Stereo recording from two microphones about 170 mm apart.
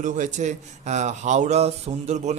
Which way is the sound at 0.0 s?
50° right (ahead or behind).